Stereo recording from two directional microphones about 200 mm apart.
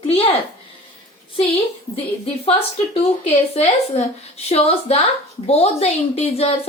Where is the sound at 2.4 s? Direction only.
30° left (ahead or behind).